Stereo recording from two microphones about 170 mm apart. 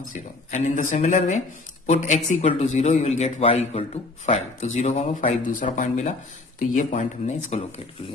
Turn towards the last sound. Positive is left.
turn(degrees=40)  # may be behind; listen again after turning